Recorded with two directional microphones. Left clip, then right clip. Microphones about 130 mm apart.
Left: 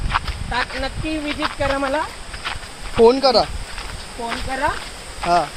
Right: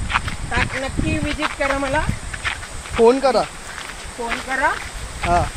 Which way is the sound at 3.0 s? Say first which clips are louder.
Left 1 dB; 20° left (ahead or behind).